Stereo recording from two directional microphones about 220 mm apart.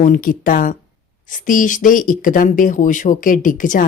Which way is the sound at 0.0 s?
40° left (ahead or behind).